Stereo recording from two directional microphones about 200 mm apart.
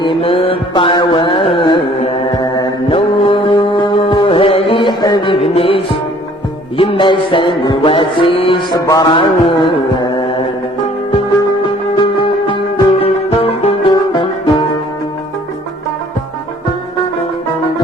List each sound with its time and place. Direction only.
0.0 s mantra: 25° left (ahead or behind)
6.7 s music: 25° left (ahead or behind)
12.1 s music: 25° left (ahead or behind)